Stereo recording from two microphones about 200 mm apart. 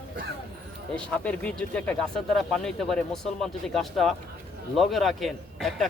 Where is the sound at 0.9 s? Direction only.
5° left (ahead or behind).